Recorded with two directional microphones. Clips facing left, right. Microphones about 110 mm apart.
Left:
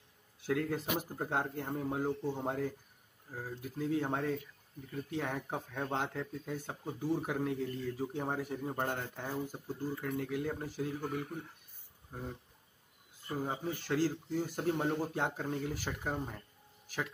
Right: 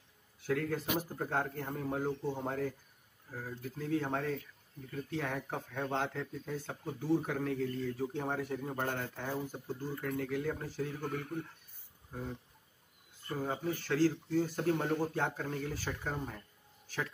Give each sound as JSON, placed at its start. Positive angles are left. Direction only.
{"t": 0.5, "sound": "a man's voice", "side_deg": 20}
{"t": 13.2, "sound": "speech", "side_deg": 15}